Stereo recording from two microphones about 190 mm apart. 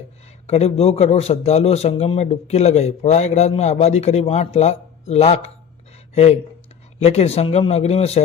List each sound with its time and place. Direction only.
0.4 s a man's voice: 35° left (ahead or behind)